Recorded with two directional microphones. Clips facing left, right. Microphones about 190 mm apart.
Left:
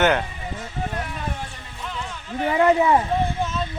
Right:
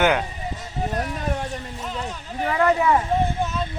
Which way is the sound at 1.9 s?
40° right (ahead or behind).